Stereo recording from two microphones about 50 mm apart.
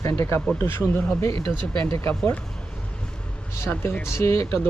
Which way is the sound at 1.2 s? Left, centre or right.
Left.